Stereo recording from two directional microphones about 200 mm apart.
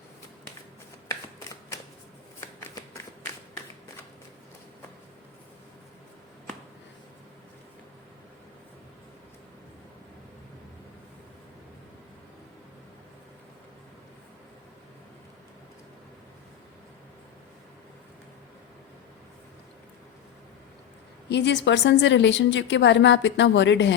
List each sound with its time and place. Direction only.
2.4 s shuffling cards: 15° left (ahead or behind)
21.2 s a woman's voice: 60° left (ahead or behind)